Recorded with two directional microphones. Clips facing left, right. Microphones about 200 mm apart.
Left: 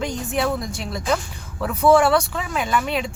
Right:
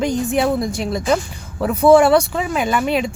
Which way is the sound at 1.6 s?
25° right (ahead or behind).